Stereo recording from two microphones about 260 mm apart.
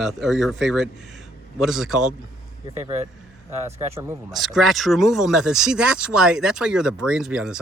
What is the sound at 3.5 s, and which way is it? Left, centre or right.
Speech, centre.